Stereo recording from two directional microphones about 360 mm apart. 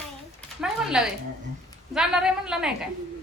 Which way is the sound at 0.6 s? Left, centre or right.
Centre.